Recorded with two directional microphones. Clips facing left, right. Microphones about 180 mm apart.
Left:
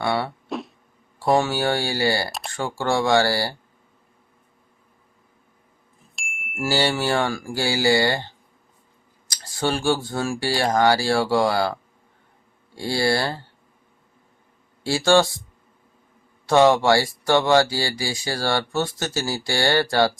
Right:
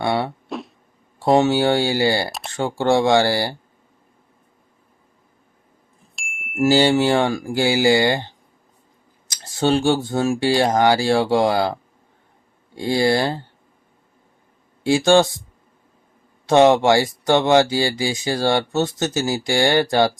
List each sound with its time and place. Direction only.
0.0 s speech: 20° right (ahead or behind)
0.4 s a sound: centre (ahead or behind)
1.2 s speech: 20° right (ahead or behind)
6.1 s music: centre (ahead or behind)
6.6 s speech: 20° right (ahead or behind)
14.8 s speech: 20° right (ahead or behind)
16.5 s speech: 20° right (ahead or behind)